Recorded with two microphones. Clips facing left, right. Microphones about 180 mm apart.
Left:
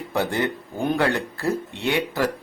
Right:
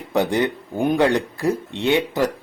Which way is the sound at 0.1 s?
20° right (ahead or behind).